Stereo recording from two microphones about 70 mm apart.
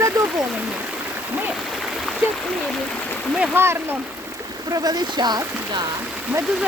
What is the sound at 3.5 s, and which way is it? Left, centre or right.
Speech, right.